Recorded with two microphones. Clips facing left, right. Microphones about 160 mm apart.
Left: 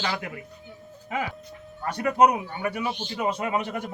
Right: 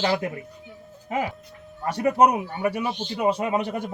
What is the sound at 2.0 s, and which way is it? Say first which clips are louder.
Speech: right 1 dB; 25° right (ahead or behind).